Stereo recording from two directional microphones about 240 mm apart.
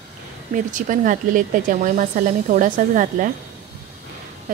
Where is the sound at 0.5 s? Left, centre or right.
Right.